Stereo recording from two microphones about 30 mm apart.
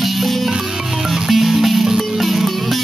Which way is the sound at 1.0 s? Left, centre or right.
Centre.